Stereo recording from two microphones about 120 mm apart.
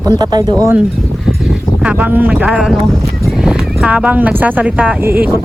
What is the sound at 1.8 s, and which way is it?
Speech, 10° right (ahead or behind).